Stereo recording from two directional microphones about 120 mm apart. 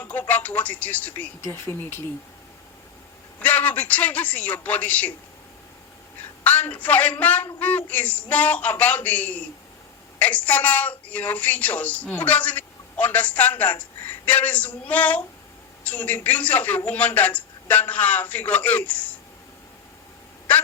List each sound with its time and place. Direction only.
0.0 s a woman's voice: 15° left (ahead or behind)
1.5 s speech: 25° left (ahead or behind)
3.4 s a woman's voice: 15° left (ahead or behind)
6.4 s a woman's voice: 15° left (ahead or behind)